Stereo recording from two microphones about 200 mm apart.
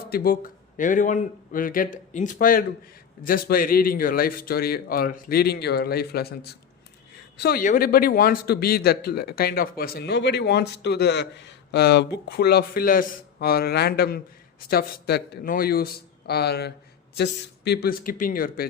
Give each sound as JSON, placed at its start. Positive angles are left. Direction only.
{"t": 0.1, "sound": "speech", "side_deg": 50}